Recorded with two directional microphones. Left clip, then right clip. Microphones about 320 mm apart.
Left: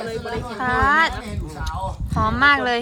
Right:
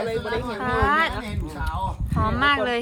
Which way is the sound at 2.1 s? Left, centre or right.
Centre.